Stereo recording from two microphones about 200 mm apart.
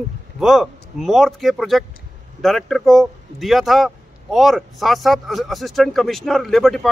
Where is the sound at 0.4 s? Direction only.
Centre (ahead or behind).